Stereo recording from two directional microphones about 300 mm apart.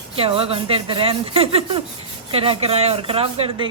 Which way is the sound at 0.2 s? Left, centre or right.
Centre.